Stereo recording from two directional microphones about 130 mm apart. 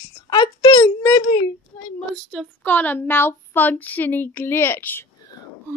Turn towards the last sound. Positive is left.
turn(degrees=15)  # may be behind; listen again after turning